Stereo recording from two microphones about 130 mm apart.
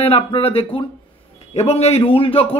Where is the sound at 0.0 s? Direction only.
50° left (ahead or behind).